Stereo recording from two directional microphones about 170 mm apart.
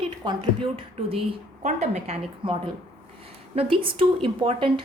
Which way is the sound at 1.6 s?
45° right (ahead or behind).